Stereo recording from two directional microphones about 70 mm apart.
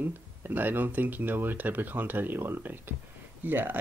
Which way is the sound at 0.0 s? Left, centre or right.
Right.